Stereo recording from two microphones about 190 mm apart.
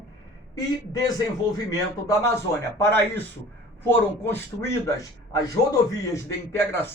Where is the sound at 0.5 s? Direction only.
20° left (ahead or behind).